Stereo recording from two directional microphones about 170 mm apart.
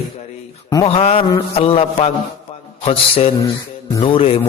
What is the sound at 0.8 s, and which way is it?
Mantra, 35° left (ahead or behind).